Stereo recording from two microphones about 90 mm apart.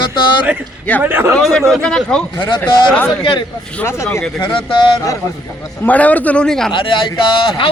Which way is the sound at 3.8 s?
30° left (ahead or behind).